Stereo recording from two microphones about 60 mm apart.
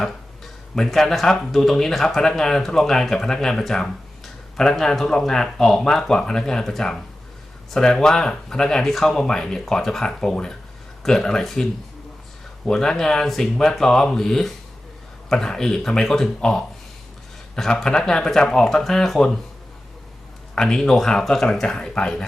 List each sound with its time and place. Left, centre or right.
0.0 s speech: centre
17.8 s speech: centre
20.6 s speech: centre